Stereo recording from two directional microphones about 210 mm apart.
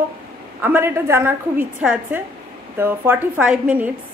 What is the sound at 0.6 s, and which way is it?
A woman's voice, 10° right (ahead or behind).